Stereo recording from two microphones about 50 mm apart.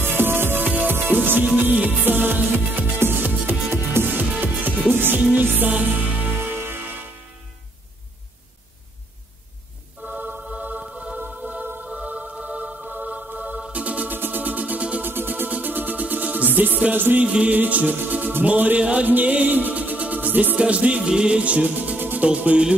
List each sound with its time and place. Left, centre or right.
0.0 s music: right
0.7 s music: right
6.3 s music: right
10.0 s music: right; by 11.1 s centre
11.1 s music: right
14.1 s music: right
15.0 s music: right
17.2 s music: right
19.0 s music: right
20.5 s music: right